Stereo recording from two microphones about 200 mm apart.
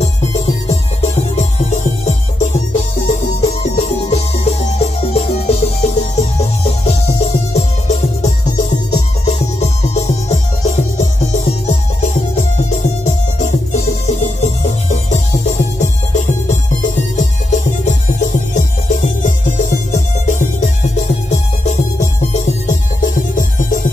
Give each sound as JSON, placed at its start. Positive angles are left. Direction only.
{"t": 0.0, "sound": "music", "side_deg": 30}
{"t": 13.7, "sound": "music", "side_deg": 35}